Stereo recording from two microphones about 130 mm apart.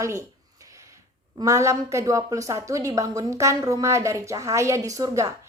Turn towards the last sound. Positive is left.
turn(degrees=-25)  # may be behind; listen again after turning